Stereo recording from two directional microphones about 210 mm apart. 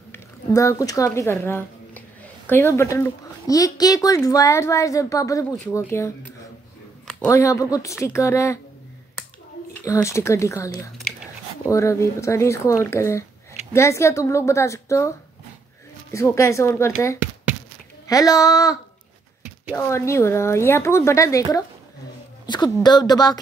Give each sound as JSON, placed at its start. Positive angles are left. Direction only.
{"t": 0.1, "sound": "speech", "side_deg": 15}
{"t": 7.2, "sound": "a woman's voice", "side_deg": 15}
{"t": 9.8, "sound": "a woman's voice", "side_deg": 15}
{"t": 18.0, "sound": "a woman's voice", "side_deg": 15}